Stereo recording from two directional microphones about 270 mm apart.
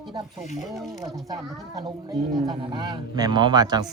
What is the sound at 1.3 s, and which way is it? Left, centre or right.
A man's voice, centre.